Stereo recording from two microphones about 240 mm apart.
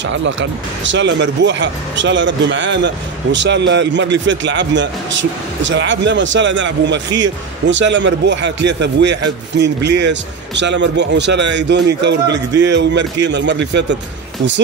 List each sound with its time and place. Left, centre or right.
0.0 s speech: right